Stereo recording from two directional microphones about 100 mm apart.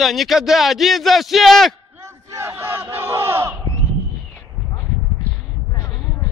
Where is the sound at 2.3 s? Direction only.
25° right (ahead or behind).